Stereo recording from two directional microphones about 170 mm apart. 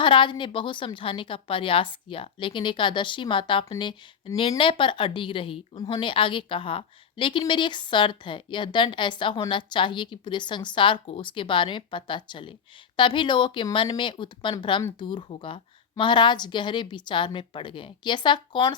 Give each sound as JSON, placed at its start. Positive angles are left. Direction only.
{"t": 0.0, "sound": "speech", "side_deg": 30}